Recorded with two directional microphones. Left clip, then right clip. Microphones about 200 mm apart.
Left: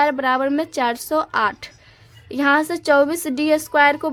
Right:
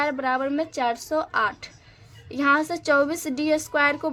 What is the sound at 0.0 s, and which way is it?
A woman's voice, 30° left (ahead or behind).